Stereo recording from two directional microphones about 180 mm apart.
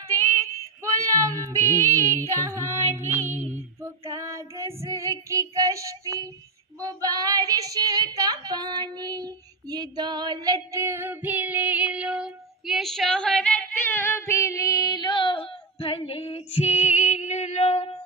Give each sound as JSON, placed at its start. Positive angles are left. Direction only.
{"t": 0.8, "sound": "female singing", "side_deg": -15}
{"t": 6.7, "sound": "speech", "side_deg": -20}